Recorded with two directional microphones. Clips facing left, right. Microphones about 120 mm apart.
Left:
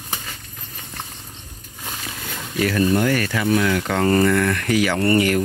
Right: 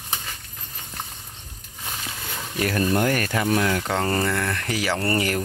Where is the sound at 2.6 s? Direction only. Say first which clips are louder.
Left 3 dB; 35° right (ahead or behind).